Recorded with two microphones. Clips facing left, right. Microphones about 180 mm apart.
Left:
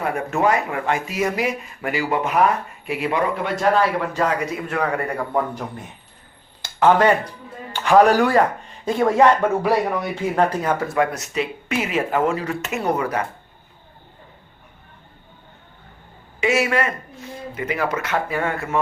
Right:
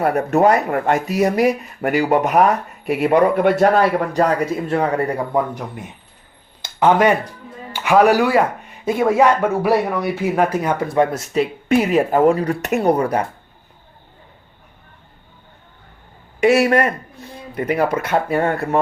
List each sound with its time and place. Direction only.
0.0 s a man's voice: 40° right (ahead or behind)
4.8 s speech: 20° right (ahead or behind)
6.6 s a sound: 10° right (ahead or behind)
7.7 s speech: 10° right (ahead or behind)
10.9 s speech: 30° right (ahead or behind)
16.4 s speech: 65° right (ahead or behind)
16.6 s a man's voice: 40° right (ahead or behind)
18.3 s speech: 35° right (ahead or behind)